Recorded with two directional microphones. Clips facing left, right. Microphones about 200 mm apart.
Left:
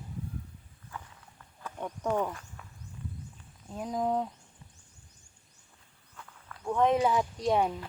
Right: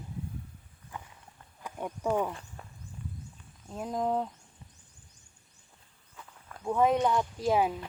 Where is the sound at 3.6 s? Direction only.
Centre (ahead or behind).